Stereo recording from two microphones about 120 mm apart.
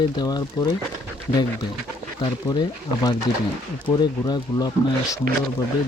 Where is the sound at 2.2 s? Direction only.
35° left (ahead or behind).